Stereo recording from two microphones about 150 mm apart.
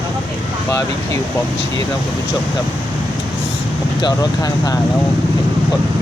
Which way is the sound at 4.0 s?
25° left (ahead or behind).